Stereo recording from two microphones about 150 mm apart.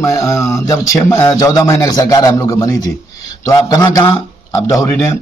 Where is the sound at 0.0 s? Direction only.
20° left (ahead or behind).